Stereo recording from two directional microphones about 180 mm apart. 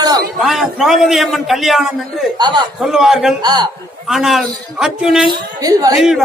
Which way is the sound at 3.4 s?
25° right (ahead or behind).